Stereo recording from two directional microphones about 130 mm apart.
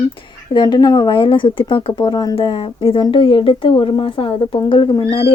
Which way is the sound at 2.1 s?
30° left (ahead or behind).